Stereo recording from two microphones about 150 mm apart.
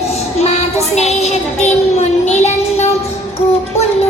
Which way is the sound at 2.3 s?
45° left (ahead or behind).